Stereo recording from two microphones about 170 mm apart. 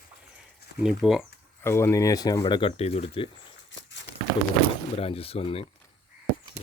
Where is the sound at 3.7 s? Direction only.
90° left.